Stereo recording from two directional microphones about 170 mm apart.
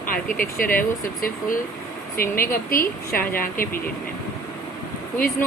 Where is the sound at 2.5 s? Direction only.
55° left (ahead or behind).